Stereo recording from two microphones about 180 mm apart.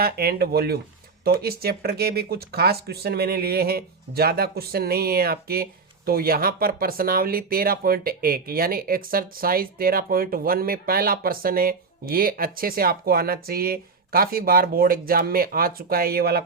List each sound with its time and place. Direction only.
0.0 s speech: 60° right (ahead or behind)